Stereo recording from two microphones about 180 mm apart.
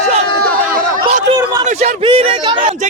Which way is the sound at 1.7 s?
35° right (ahead or behind).